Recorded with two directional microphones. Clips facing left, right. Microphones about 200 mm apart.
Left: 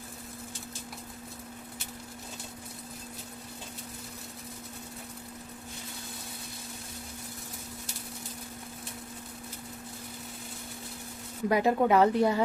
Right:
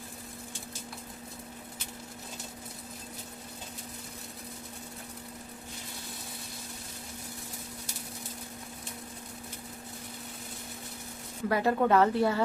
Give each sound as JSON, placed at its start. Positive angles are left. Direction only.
{"t": 11.4, "sound": "speech", "side_deg": 15}